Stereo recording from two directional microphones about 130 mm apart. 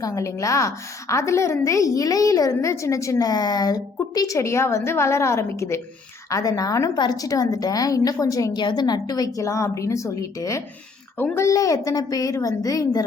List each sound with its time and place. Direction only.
0.0 s a woman's voice: 25° left (ahead or behind)